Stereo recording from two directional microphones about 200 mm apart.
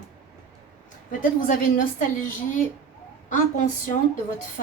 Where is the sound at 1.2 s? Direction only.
40° left (ahead or behind).